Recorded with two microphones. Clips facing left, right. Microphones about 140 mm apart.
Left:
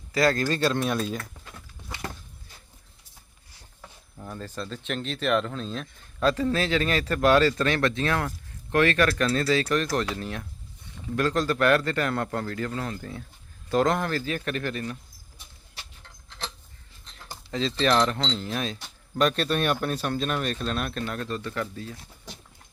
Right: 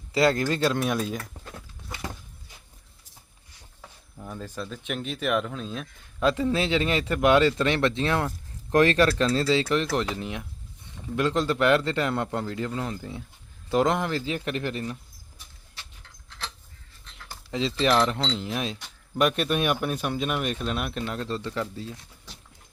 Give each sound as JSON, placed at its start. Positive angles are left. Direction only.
{"t": 0.1, "sound": "speech", "side_deg": -25}
{"t": 3.8, "sound": "a man's voice", "side_deg": -5}
{"t": 17.5, "sound": "speech", "side_deg": -15}